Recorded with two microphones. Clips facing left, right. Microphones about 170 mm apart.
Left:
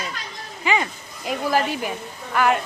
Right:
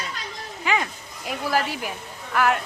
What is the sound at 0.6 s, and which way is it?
Speech, centre (ahead or behind).